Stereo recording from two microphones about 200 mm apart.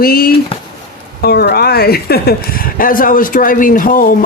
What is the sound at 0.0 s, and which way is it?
A woman's voice, 50° left (ahead or behind).